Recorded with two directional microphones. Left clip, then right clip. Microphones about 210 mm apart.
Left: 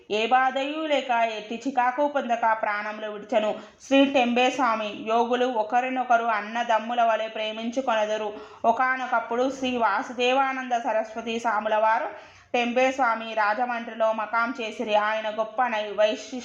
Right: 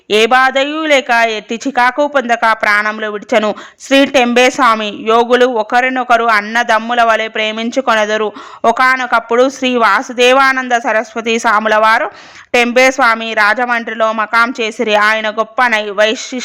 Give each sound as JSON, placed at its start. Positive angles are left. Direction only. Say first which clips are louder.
{"t": 0.1, "sound": "speech", "louder": "right 13 dB", "side_deg": -40}